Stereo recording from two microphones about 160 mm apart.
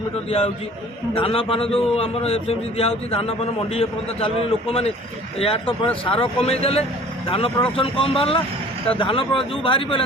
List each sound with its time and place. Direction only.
0.3 s a man's voice: 40° left (ahead or behind)
5.4 s a man's voice: 35° left (ahead or behind)